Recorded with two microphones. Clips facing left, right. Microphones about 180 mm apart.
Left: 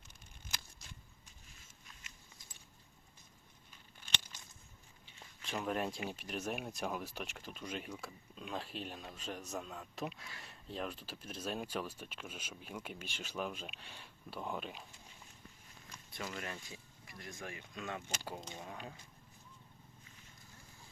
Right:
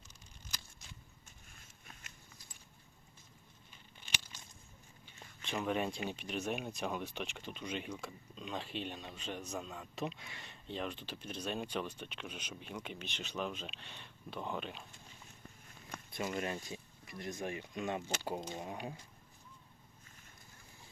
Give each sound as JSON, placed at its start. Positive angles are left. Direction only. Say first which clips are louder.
{"t": 1.5, "sound": "a sound", "louder": "right 3 dB", "side_deg": -55}
{"t": 5.4, "sound": "speech", "louder": "right 2 dB", "side_deg": 0}
{"t": 16.1, "sound": "speech", "louder": "right 6 dB", "side_deg": -20}